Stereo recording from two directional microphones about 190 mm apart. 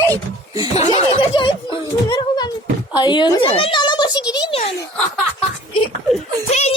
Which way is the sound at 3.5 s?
30° left (ahead or behind).